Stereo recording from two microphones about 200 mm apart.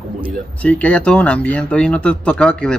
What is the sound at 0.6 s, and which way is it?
Speech, 5° left (ahead or behind).